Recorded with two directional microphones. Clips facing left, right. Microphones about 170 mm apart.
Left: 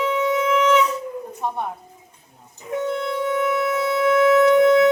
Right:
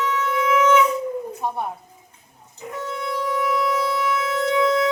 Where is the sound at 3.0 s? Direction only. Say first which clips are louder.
Left 3 dB; 55° left (ahead or behind).